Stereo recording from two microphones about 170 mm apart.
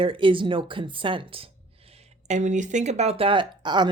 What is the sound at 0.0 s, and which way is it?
Speech, 30° right (ahead or behind).